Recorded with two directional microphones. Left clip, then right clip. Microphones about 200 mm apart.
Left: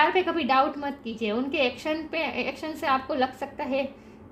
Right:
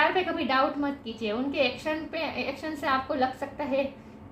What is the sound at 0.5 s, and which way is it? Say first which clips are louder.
A woman's voice: left 2 dB; 60° left (ahead or behind).